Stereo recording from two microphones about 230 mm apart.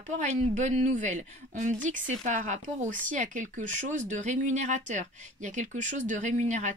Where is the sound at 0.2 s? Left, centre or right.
Right.